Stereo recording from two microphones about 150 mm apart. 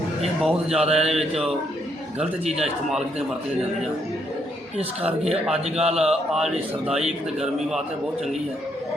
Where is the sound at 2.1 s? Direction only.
45° right (ahead or behind).